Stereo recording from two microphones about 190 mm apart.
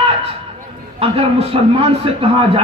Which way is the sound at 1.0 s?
30° right (ahead or behind).